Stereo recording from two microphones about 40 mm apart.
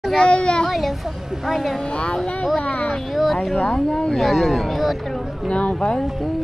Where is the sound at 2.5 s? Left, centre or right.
Left.